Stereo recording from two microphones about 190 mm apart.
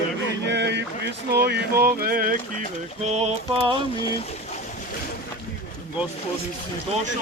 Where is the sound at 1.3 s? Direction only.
60° right (ahead or behind).